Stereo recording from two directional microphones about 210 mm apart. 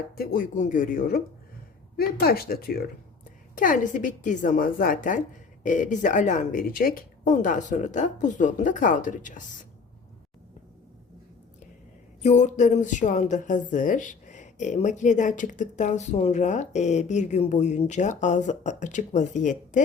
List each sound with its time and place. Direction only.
0.2 s a woman's voice: 45° left (ahead or behind)
12.2 s a woman's voice: 35° left (ahead or behind)